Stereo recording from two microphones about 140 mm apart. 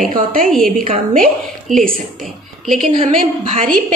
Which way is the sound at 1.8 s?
75° right (ahead or behind).